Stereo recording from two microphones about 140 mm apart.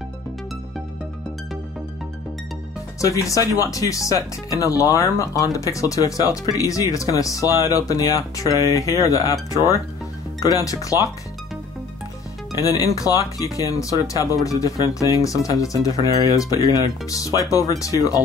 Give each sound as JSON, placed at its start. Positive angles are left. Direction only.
{"t": 3.0, "sound": "speech", "side_deg": 25}
{"t": 12.5, "sound": "speech", "side_deg": 25}